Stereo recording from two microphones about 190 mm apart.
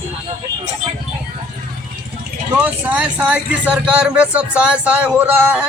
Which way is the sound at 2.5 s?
10° right (ahead or behind).